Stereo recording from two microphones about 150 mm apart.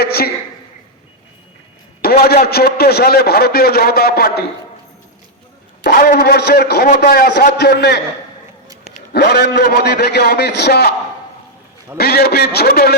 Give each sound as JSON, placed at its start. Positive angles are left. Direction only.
{"t": 0.0, "sound": "a sound", "side_deg": 90}
{"t": 2.0, "sound": "a man's voice", "side_deg": 90}
{"t": 5.8, "sound": "a man's voice", "side_deg": 85}
{"t": 9.1, "sound": "a man's voice", "side_deg": 90}
{"t": 11.9, "sound": "a man's voice", "side_deg": 90}